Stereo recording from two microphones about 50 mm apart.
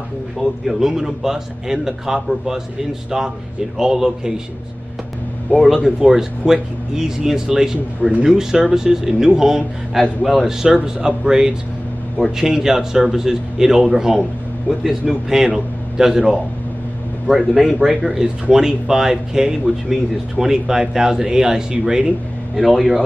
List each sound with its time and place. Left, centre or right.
0.4 s speech: centre
3.7 s speech: centre
5.5 s a man's voice: centre
22.6 s a man's voice: centre